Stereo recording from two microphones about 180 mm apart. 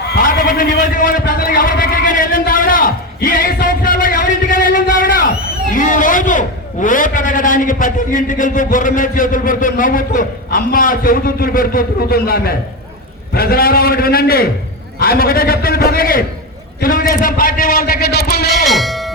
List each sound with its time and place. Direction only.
0.1 s a sound: 50° left (ahead or behind)
5.7 s vehicle: 45° left (ahead or behind)
6.8 s a man's voice: 50° left (ahead or behind)
18.6 s music: centre (ahead or behind)